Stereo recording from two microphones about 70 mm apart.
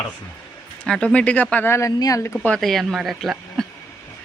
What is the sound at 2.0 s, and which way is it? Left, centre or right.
Speech, left.